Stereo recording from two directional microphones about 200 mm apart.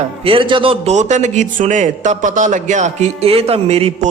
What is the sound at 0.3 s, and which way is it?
A man's voice, 25° right (ahead or behind).